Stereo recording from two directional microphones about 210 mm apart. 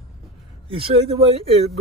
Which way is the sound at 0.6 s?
25° right (ahead or behind).